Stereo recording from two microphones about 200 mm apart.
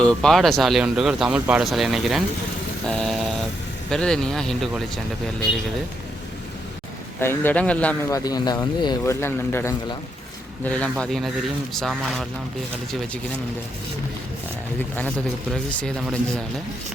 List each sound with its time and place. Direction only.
0.0 s speech: 5° left (ahead or behind)
7.2 s speech: 10° left (ahead or behind)
8.2 s speech: 20° left (ahead or behind); by 12.2 s centre (ahead or behind)